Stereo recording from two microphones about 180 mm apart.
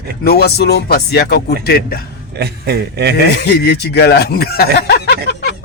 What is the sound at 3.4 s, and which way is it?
Speech, 70° left (ahead or behind).